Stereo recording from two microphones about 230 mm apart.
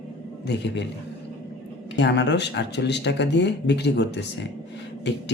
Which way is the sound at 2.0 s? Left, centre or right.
Left.